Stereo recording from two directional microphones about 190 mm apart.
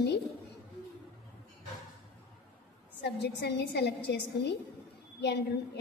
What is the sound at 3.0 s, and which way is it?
Speech, 65° left (ahead or behind).